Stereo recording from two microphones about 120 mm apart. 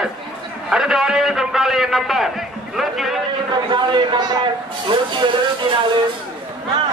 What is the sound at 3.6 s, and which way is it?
Speech, 40° right (ahead or behind).